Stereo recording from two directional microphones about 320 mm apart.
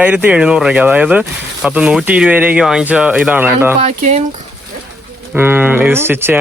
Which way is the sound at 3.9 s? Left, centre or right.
Right.